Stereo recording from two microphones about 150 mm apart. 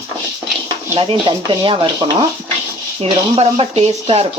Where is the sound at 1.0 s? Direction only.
30° right (ahead or behind).